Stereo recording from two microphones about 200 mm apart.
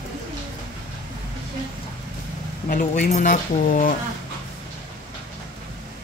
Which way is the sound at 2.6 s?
40° left (ahead or behind).